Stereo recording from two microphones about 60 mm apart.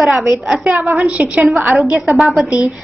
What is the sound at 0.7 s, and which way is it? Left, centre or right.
Speech, right.